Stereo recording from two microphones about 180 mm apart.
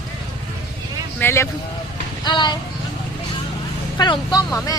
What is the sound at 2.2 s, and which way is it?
Vehicle, 25° left (ahead or behind).